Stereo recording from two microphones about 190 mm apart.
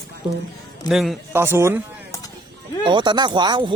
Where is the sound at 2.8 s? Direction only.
25° right (ahead or behind).